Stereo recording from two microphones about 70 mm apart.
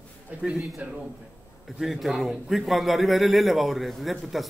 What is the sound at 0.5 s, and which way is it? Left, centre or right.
A man's voice, centre.